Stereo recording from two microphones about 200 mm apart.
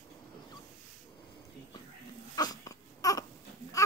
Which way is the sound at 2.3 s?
20° left (ahead or behind).